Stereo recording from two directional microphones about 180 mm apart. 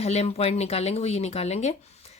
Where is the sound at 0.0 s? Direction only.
35° left (ahead or behind).